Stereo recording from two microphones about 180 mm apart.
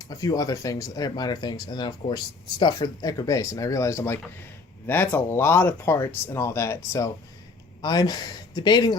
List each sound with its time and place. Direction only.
0.0 s speech: 20° left (ahead or behind)